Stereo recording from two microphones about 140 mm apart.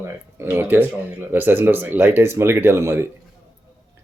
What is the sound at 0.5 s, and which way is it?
A man's voice, 15° right (ahead or behind).